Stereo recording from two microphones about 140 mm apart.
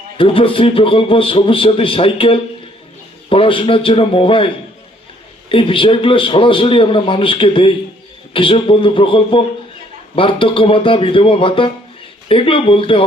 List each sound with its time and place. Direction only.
0.2 s a man's voice: 40° left (ahead or behind)